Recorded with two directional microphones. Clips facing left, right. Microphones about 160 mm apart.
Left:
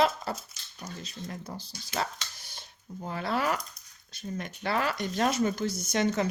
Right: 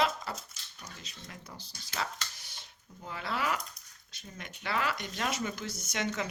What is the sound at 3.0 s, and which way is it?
Speech, 40° left (ahead or behind).